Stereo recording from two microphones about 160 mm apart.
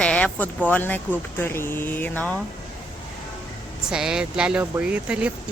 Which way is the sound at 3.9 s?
5° right (ahead or behind).